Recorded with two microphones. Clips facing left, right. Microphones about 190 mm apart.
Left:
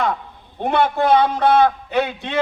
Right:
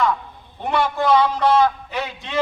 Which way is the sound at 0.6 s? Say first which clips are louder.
Left 3 dB; 55° left (ahead or behind).